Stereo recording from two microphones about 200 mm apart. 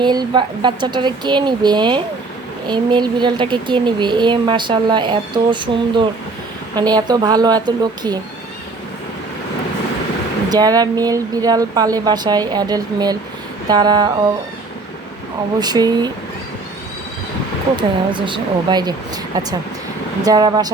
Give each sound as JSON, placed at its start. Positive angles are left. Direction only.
{"t": 0.0, "sound": "speech", "side_deg": -20}
{"t": 10.5, "sound": "speech", "side_deg": -20}
{"t": 15.5, "sound": "speech", "side_deg": -20}
{"t": 17.7, "sound": "speech", "side_deg": -25}
{"t": 20.2, "sound": "speech", "side_deg": -20}